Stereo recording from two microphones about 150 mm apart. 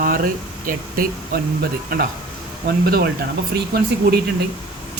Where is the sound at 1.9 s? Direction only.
85° right.